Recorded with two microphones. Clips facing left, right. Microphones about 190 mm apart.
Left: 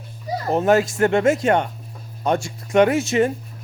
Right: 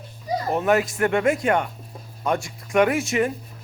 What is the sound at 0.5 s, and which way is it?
Speech, 30° left (ahead or behind).